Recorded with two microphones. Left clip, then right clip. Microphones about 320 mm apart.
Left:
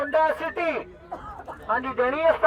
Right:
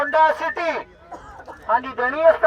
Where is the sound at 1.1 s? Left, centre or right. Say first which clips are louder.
Left 3 dB; right.